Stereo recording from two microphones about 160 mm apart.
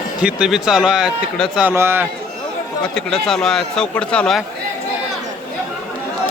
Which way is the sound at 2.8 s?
5° left (ahead or behind).